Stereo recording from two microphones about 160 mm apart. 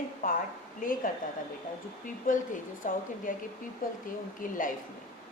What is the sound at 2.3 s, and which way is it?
A woman's voice, 60° left (ahead or behind).